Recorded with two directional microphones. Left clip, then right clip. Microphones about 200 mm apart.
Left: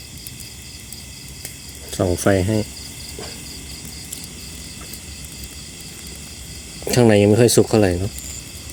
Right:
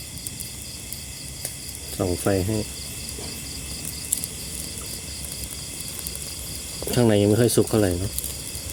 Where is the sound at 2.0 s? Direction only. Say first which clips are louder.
Left 6 dB; 40° left (ahead or behind).